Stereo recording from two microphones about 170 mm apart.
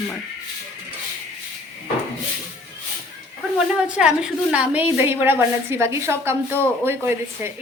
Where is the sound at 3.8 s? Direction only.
5° right (ahead or behind).